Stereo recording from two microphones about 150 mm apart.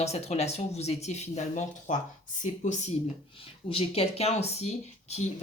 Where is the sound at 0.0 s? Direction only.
45° left (ahead or behind).